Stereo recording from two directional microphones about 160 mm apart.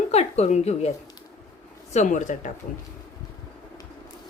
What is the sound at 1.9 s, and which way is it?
Speech, 50° left (ahead or behind).